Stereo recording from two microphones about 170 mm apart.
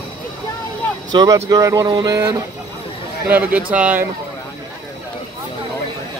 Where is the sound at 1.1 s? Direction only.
20° right (ahead or behind).